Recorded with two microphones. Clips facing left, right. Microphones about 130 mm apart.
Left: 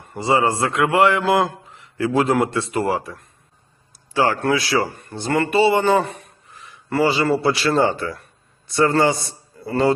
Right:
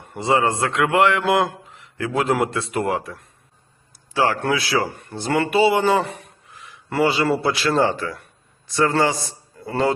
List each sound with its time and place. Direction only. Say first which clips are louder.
0.1 s a man's voice: left 1 dB; centre (ahead or behind)
4.9 s speech: right 1 dB; 15° right (ahead or behind)
5.1 s a man's voice: left 1 dB; 5° right (ahead or behind)
6.5 s a sound: left 1 dB; centre (ahead or behind)
7.0 s a man's voice: left 1 dB; centre (ahead or behind)